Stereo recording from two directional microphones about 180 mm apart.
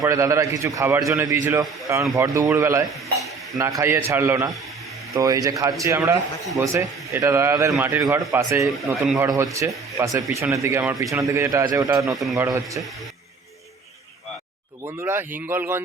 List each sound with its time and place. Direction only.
0.0 s a man's voice: 20° right (ahead or behind)
8.3 s a man's voice: 15° right (ahead or behind)
8.9 s a man's voice: centre (ahead or behind)
9.1 s a man's voice: 20° right (ahead or behind)
12.1 s a man's voice: centre (ahead or behind)
12.4 s a man's voice: 15° right (ahead or behind)
14.9 s a man's voice: 15° right (ahead or behind)